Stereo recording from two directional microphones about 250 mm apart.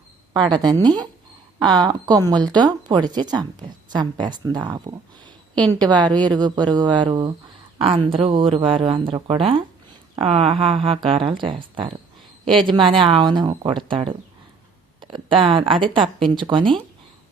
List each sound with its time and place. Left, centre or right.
0.3 s speech: centre
5.8 s speech: centre